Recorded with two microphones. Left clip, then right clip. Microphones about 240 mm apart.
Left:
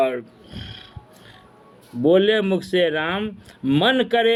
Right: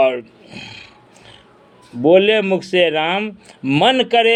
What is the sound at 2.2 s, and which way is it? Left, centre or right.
Speech, centre.